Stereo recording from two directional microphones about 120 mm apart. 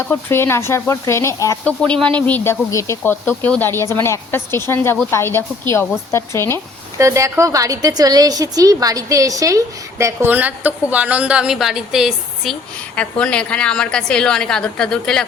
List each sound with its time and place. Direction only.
0.1 s speech: 20° left (ahead or behind)
1.6 s a woman's voice: 10° left (ahead or behind)
7.0 s a woman's voice: 25° right (ahead or behind); by 12.5 s 5° right (ahead or behind)
13.0 s a woman's voice: 10° left (ahead or behind)